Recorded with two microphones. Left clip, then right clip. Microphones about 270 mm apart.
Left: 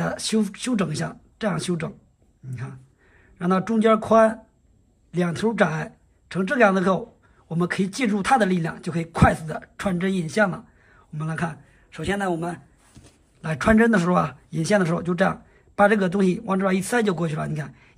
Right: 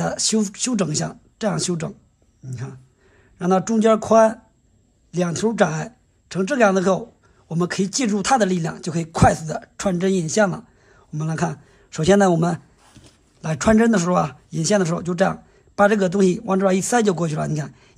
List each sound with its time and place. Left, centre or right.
0.0 s speech: centre
13.4 s speech: centre